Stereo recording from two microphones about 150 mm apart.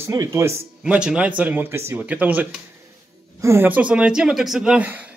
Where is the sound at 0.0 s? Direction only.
20° right (ahead or behind).